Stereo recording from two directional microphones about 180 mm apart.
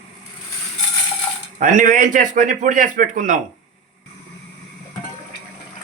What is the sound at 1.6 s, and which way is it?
Speech, 45° right (ahead or behind).